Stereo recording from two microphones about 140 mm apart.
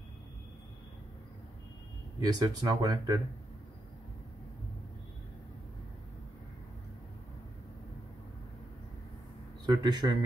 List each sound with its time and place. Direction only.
2.1 s speech: 25° right (ahead or behind)
9.7 s speech: 30° right (ahead or behind)